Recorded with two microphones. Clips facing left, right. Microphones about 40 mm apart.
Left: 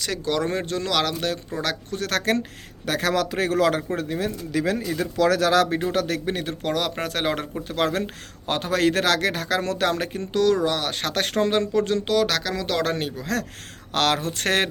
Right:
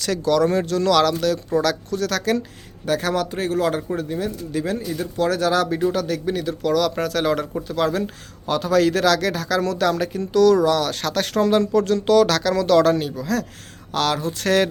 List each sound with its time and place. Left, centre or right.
0.3 s speech: left
2.8 s a man's voice: left
3.9 s speech: left
5.6 s speech: left
7.7 s speech: left
12.0 s speech: centre
12.8 s speech: left
13.9 s speech: left